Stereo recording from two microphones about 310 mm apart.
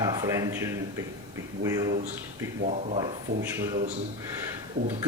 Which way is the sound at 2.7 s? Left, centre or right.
Right.